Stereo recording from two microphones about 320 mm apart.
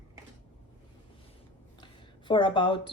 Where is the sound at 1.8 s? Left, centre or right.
Centre.